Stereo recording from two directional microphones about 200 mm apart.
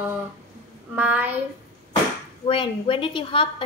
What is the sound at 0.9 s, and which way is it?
Speech, 10° right (ahead or behind).